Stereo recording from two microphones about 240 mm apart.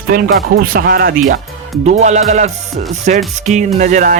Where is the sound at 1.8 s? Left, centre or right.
Right.